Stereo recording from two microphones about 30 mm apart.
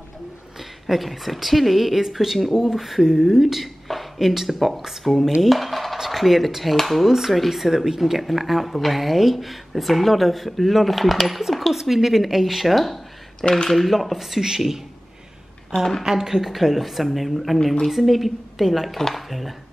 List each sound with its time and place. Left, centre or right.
0.6 s a woman's voice: centre
2.8 s speech: centre
3.8 s a sound: centre
4.3 s speech: centre
4.6 s speech: centre
5.4 s dishes: centre
6.0 s speech: centre
8.0 s speech: centre
15.7 s speech: centre
16.0 s speech: centre
16.5 s speech: centre